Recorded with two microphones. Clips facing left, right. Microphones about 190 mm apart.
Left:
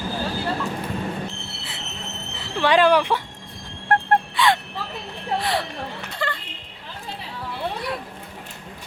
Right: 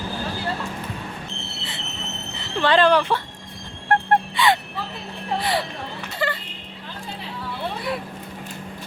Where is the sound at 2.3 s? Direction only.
10° left (ahead or behind).